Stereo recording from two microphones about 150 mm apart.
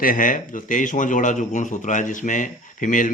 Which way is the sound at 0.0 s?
65° left (ahead or behind).